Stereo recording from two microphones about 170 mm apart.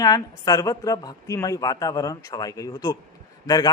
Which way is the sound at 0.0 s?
20° left (ahead or behind).